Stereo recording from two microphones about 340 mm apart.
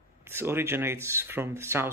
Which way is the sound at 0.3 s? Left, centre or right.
Centre.